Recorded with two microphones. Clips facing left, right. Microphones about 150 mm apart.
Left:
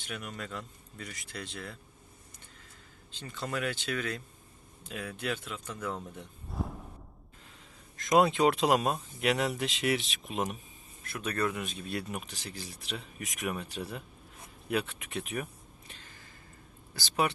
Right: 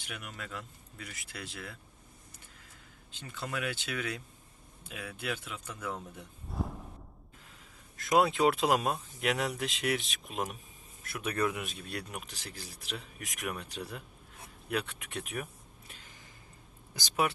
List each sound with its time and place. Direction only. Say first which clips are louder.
0.0 s speech: left 4 dB; 5° right (ahead or behind)
3.2 s speech: left 2 dB; 5° right (ahead or behind)
6.5 s a sound: even; centre (ahead or behind)
7.9 s speech: left 2 dB; 5° right (ahead or behind)
15.9 s a sound: left 1 dB; 15° right (ahead or behind)
17.2 s speech: even; centre (ahead or behind)